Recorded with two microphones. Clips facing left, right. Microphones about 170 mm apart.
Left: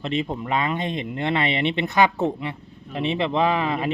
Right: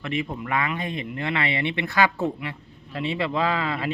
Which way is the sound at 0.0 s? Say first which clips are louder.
Left 3 dB; 25° left (ahead or behind).